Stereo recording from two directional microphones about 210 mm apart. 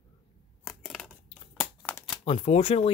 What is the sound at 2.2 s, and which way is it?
Speech, 30° left (ahead or behind).